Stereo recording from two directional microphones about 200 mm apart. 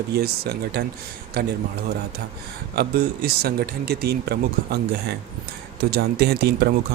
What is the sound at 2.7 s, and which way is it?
Speech, 55° right (ahead or behind).